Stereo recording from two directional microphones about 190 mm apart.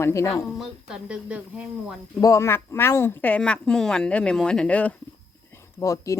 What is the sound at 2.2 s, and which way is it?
Speech, 15° left (ahead or behind).